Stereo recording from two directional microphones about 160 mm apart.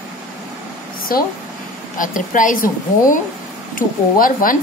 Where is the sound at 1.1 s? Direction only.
65° left (ahead or behind).